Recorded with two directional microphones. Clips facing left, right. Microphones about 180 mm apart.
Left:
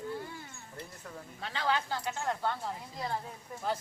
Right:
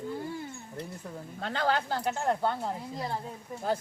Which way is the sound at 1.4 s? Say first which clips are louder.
Right 4 dB; 50° right (ahead or behind).